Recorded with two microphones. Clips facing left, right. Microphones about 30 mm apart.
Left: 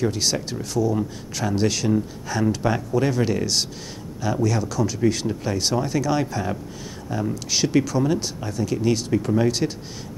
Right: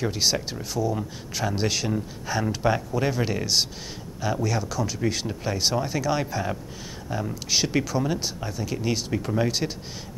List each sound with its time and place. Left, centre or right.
0.0 s speech: centre